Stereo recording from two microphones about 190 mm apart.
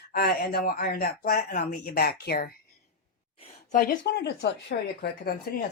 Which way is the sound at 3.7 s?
45° left (ahead or behind).